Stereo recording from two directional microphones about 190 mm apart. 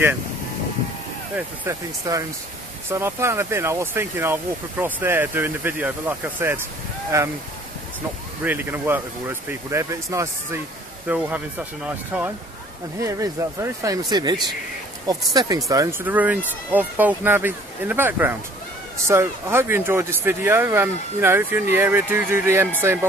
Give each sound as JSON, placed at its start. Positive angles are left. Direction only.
{"t": 1.7, "sound": "speech", "side_deg": -15}
{"t": 8.5, "sound": "speech", "side_deg": -10}
{"t": 15.3, "sound": "speech", "side_deg": -20}